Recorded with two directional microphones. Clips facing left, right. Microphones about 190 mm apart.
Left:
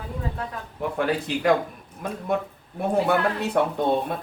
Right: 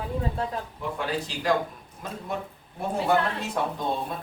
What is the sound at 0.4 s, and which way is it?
Speech, 30° right (ahead or behind).